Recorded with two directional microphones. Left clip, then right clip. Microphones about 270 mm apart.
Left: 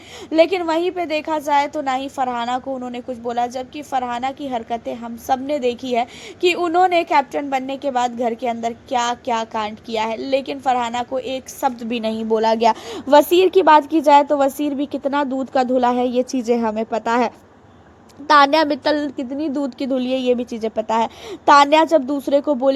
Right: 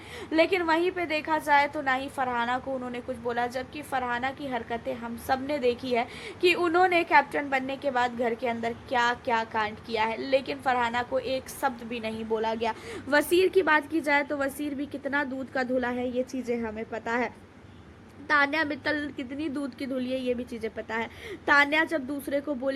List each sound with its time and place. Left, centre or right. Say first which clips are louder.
0.3 s a woman's voice: left 8 dB; centre